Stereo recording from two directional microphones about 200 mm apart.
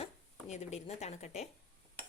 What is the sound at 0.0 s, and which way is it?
Speech, 35° left (ahead or behind).